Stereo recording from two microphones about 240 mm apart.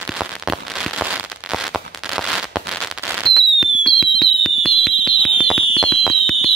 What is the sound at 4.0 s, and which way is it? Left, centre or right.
Fireworks, centre.